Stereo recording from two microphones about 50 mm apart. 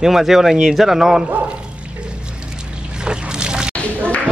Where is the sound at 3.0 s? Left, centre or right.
Centre.